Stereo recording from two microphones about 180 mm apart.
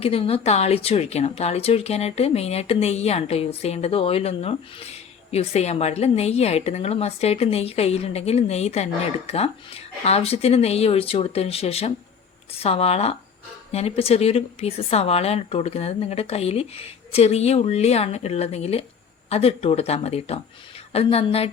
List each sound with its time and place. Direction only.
0.0 s speech: 30° left (ahead or behind)